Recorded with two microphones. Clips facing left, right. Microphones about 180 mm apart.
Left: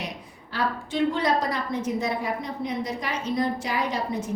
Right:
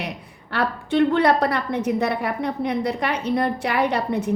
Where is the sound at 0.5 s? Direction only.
60° right (ahead or behind).